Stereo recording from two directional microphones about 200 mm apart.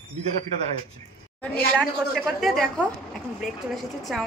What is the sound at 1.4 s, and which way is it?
Speech, 5° left (ahead or behind).